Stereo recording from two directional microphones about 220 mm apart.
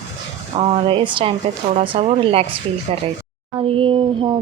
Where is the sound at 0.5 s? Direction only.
30° right (ahead or behind).